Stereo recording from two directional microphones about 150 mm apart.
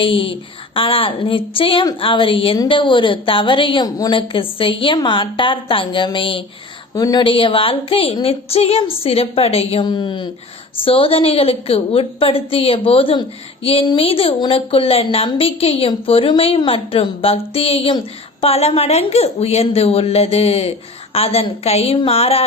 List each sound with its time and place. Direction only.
0.0 s a woman's voice: 35° left (ahead or behind)
4.2 s a woman's voice: 35° left (ahead or behind)